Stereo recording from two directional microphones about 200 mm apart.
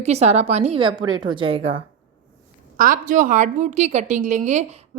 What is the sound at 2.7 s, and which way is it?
A woman's voice, 45° right (ahead or behind).